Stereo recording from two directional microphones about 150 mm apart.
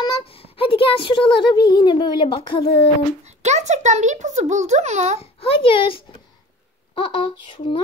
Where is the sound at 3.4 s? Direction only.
50° right (ahead or behind).